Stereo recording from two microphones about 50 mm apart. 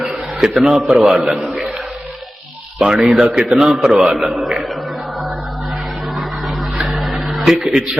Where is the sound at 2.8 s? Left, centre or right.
Centre.